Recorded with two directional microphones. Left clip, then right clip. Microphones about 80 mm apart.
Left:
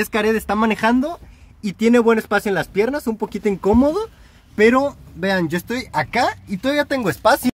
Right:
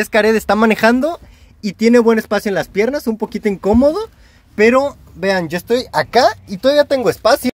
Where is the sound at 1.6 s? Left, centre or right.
Centre.